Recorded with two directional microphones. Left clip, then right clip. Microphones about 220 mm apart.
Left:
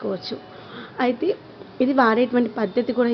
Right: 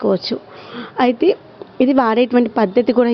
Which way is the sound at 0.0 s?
35° right (ahead or behind).